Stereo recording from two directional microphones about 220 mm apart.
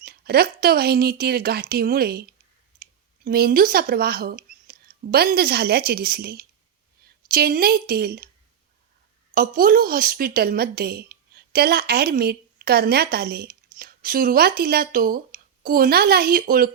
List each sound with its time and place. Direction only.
0.0 s a woman's voice: 45° right (ahead or behind)
9.3 s a woman's voice: 40° right (ahead or behind)